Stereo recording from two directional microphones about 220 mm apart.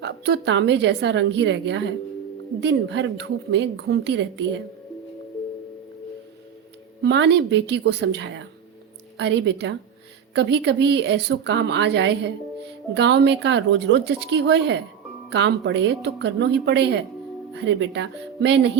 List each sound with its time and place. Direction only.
0.0 s a woman's voice: 55° right (ahead or behind)
7.0 s a woman's voice: 50° right (ahead or behind)